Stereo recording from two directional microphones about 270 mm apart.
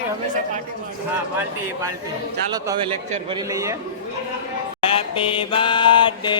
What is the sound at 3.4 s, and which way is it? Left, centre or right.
Speech, centre.